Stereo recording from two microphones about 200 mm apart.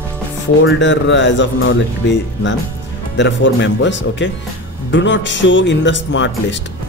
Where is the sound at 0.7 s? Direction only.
65° left (ahead or behind).